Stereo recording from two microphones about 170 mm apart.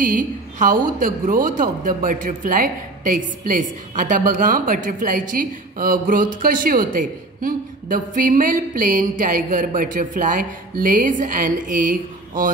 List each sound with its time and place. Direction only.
0.0 s a woman's voice: 50° right (ahead or behind)